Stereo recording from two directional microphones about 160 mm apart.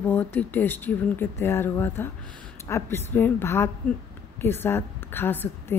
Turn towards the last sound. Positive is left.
turn(degrees=15)  # may be behind; listen again after turning